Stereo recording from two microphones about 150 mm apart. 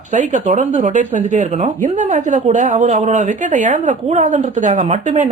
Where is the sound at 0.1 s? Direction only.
55° right (ahead or behind).